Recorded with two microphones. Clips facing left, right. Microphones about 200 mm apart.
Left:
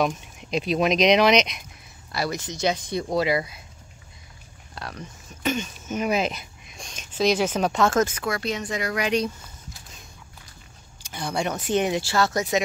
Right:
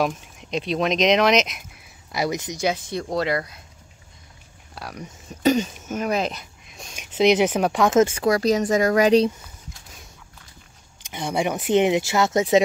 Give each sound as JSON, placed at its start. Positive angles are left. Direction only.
{"t": 0.0, "sound": "speech", "side_deg": 0}
{"t": 2.1, "sound": "speech", "side_deg": -15}
{"t": 4.7, "sound": "speech", "side_deg": -10}
{"t": 5.3, "sound": "speech", "side_deg": -35}
{"t": 5.9, "sound": "a sound", "side_deg": 0}
{"t": 7.1, "sound": "speech", "side_deg": -20}
{"t": 8.0, "sound": "speech", "side_deg": -30}
{"t": 11.1, "sound": "speech", "side_deg": -15}